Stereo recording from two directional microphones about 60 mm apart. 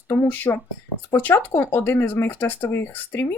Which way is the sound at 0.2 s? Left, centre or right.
Left.